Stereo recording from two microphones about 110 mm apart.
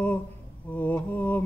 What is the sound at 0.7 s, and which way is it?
Mantra, 15° left (ahead or behind).